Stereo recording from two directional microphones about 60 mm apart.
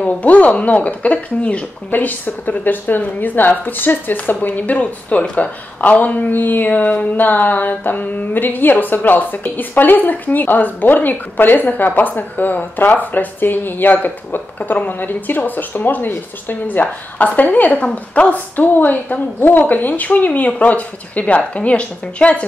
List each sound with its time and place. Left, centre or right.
0.0 s a woman's voice: left